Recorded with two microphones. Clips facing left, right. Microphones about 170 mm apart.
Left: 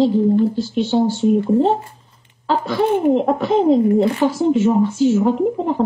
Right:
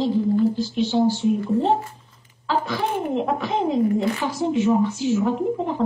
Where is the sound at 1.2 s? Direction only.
30° left (ahead or behind).